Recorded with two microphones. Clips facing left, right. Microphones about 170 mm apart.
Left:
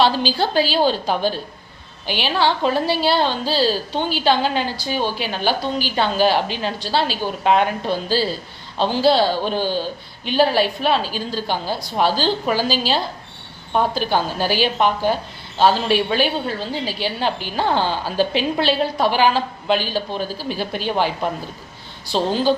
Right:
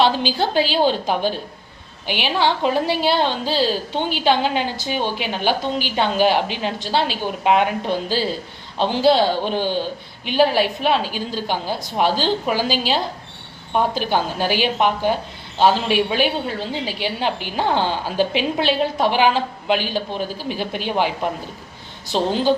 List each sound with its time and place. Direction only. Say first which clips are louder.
0.0 s a woman's voice: even; 15° right (ahead or behind)
22.1 s a woman's voice: even; 20° right (ahead or behind)